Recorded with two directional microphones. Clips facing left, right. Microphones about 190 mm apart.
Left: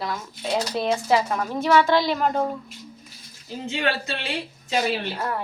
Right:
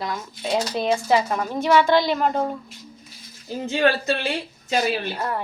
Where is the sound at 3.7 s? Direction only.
40° right (ahead or behind).